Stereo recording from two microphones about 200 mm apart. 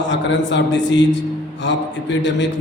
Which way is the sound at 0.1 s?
65° left (ahead or behind).